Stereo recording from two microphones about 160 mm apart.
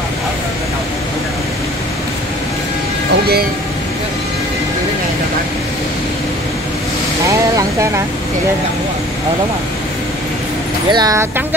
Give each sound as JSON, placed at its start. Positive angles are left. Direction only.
{"t": 10.9, "sound": "speech", "side_deg": -25}